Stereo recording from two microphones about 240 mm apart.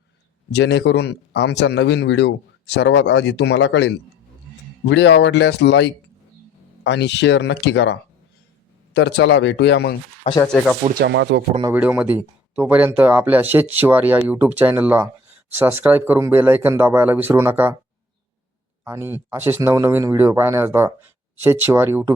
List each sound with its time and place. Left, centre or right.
0.5 s a man's voice: left
10.4 s speech: centre
10.9 s speech: right
11.6 s speech: centre
18.9 s speech: centre